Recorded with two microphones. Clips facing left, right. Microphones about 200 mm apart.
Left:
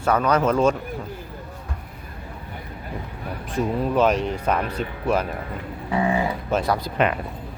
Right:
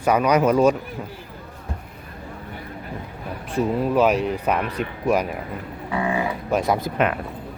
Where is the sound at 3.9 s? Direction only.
5° right (ahead or behind).